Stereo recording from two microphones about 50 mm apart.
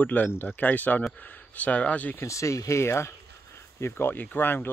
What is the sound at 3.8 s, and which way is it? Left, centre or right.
Speech, left.